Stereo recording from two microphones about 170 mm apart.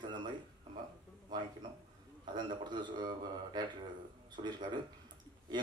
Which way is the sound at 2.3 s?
25° right (ahead or behind).